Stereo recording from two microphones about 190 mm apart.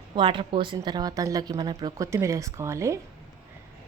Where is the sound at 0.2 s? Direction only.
25° right (ahead or behind).